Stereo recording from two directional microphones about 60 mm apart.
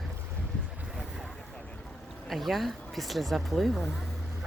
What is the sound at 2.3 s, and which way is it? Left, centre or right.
Speech, centre.